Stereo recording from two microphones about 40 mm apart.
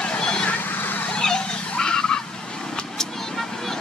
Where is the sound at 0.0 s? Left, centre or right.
Left.